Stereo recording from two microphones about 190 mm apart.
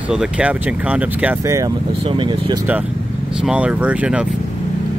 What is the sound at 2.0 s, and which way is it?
Speech, 25° right (ahead or behind).